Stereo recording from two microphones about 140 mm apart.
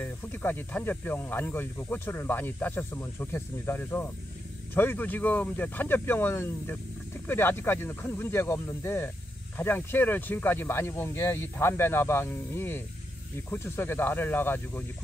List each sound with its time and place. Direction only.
0.0 s speech: 10° left (ahead or behind)